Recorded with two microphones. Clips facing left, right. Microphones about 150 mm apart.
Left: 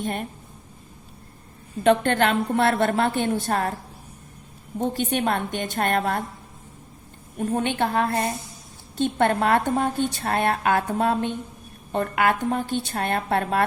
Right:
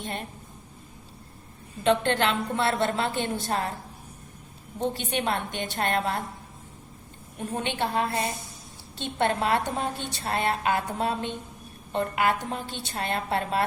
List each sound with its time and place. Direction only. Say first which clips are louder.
0.0 s a woman's voice: left 6 dB; 50° left (ahead or behind)
1.8 s a woman's voice: left 4 dB; 50° left (ahead or behind)
4.8 s a woman's voice: left 4 dB; 50° left (ahead or behind)
7.3 s a woman's voice: left 6 dB; 50° left (ahead or behind)